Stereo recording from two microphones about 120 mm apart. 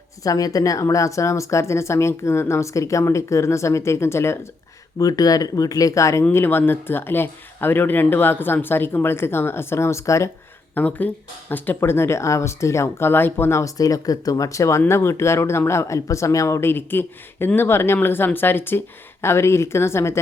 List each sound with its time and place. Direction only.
0.2 s speech: 30° left (ahead or behind)
10.8 s speech: 15° left (ahead or behind)